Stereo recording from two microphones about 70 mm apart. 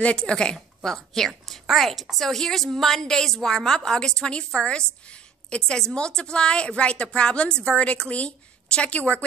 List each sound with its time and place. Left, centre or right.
0.0 s a woman's voice: centre